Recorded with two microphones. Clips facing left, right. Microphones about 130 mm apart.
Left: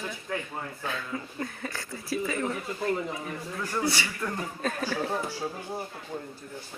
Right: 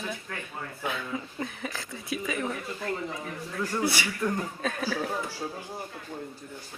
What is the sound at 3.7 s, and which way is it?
Speech, 10° right (ahead or behind).